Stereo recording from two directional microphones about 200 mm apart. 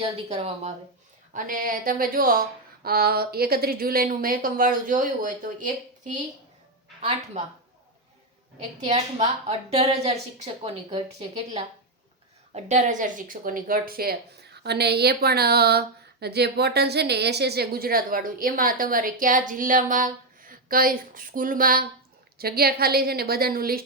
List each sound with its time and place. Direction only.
0.0 s a woman's voice: 30° right (ahead or behind)
1.3 s speech: 45° right (ahead or behind)
8.5 s a woman's voice: 30° right (ahead or behind); by 23.8 s 50° right (ahead or behind)